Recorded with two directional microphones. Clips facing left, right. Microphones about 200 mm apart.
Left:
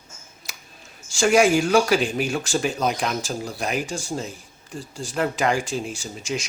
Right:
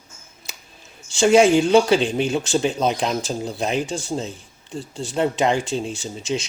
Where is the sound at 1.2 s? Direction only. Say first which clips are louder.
Right 3 dB; 25° right (ahead or behind).